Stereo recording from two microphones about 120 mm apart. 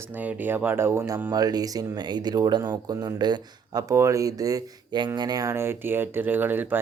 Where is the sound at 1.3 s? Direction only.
30° right (ahead or behind).